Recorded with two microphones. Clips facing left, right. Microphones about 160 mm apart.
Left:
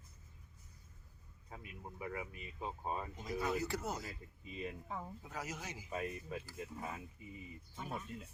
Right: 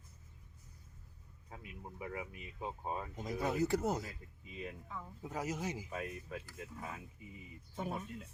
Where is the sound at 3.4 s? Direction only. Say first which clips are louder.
Right 4 dB; 45° right (ahead or behind).